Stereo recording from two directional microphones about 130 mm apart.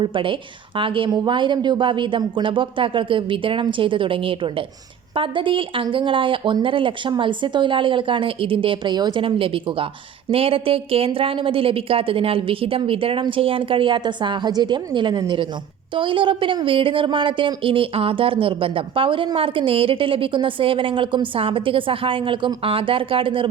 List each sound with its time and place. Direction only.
0.0 s a woman's voice: 40° right (ahead or behind)